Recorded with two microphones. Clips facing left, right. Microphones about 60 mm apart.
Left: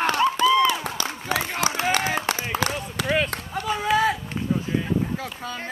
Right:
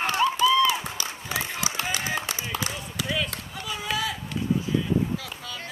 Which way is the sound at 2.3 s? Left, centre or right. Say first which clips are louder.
Left 6 dB; left.